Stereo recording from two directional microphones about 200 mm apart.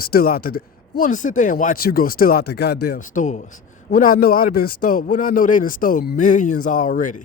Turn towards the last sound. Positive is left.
turn(degrees=40)  # may be behind; listen again after turning